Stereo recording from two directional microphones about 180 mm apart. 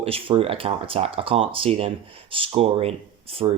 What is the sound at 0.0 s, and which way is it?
Speech, 30° right (ahead or behind).